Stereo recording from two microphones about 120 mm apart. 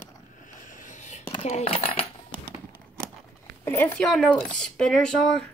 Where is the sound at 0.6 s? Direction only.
90° left.